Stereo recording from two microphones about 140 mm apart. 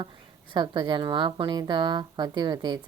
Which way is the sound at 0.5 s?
30° right (ahead or behind).